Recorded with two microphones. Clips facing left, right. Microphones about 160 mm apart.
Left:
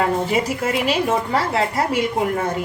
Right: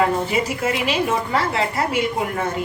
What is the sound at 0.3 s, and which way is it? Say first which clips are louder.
A woman's voice: left 1 dB; 35° left (ahead or behind).